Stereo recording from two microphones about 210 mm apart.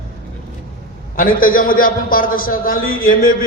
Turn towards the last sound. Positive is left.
turn(degrees=40)  # may be behind; listen again after turning